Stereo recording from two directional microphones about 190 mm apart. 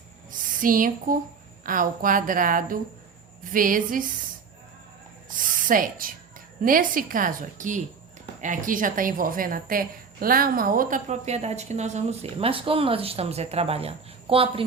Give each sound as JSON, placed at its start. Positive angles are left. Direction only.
{"t": 0.3, "sound": "a woman's voice", "side_deg": -45}
{"t": 5.5, "sound": "a woman's voice", "side_deg": -45}